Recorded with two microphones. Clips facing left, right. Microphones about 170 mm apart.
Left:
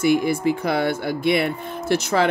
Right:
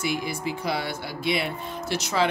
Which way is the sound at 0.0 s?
50° left (ahead or behind).